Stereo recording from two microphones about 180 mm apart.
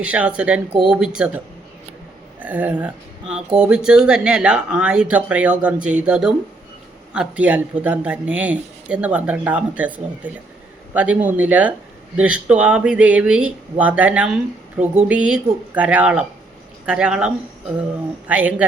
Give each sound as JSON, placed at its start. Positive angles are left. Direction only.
{"t": 0.0, "sound": "speech", "side_deg": -5}
{"t": 0.7, "sound": "speech", "side_deg": -30}
{"t": 0.9, "sound": "speech", "side_deg": -5}
{"t": 2.4, "sound": "speech", "side_deg": -10}